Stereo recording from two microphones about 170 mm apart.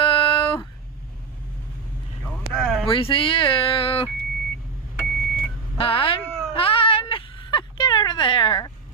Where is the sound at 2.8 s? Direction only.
30° left (ahead or behind).